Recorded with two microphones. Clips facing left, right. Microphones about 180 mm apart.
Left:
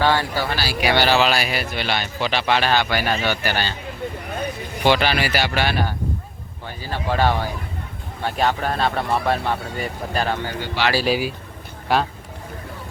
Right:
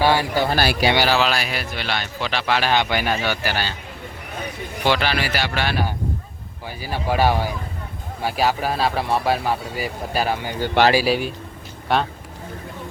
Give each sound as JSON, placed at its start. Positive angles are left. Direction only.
{"t": 0.0, "sound": "speech", "side_deg": -10}
{"t": 0.5, "sound": "speech", "side_deg": -55}
{"t": 0.9, "sound": "speech", "side_deg": 0}
{"t": 2.6, "sound": "speech", "side_deg": -15}
{"t": 4.9, "sound": "speech", "side_deg": 0}
{"t": 6.7, "sound": "speech", "side_deg": -10}